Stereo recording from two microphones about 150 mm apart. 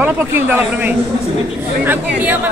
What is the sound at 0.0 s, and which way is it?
Speech, 10° right (ahead or behind).